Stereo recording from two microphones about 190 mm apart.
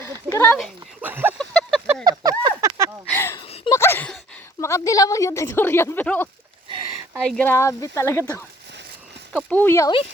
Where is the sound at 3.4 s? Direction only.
30° left (ahead or behind).